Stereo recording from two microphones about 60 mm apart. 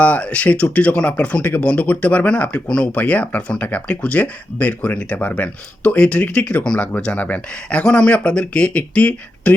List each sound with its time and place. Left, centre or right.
0.0 s speech: left